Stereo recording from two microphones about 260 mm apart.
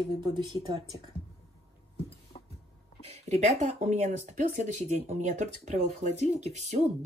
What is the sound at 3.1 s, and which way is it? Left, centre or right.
Speech, right.